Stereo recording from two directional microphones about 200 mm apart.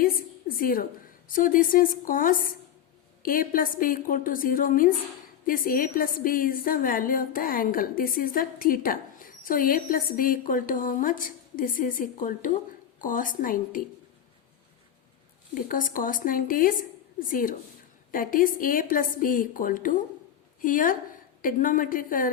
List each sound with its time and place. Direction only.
0.0 s a sound: 45° left (ahead or behind)
1.3 s a woman's voice: 45° left (ahead or behind)
15.5 s a woman's voice: 45° left (ahead or behind)